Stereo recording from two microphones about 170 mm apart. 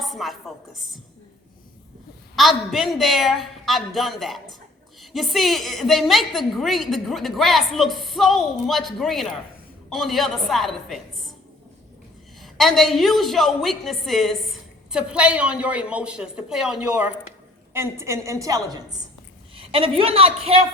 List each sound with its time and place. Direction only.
0.0 s a woman's voice: centre (ahead or behind)
2.3 s a woman's voice: centre (ahead or behind)
12.4 s a woman's voice: centre (ahead or behind)
17.7 s a woman's voice: 15° right (ahead or behind)
19.5 s a woman's voice: 30° right (ahead or behind)